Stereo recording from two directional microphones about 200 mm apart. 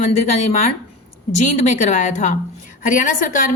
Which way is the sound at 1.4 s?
35° left (ahead or behind).